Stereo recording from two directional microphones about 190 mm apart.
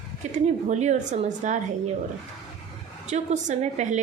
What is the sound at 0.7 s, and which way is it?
Speech, 40° right (ahead or behind).